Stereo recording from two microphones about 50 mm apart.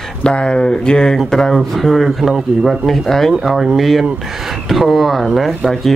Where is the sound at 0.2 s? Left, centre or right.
Centre.